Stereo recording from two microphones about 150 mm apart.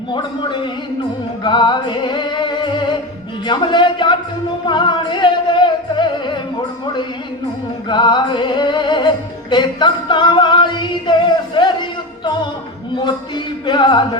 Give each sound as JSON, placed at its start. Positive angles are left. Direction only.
{"t": 0.1, "sound": "music", "side_deg": 30}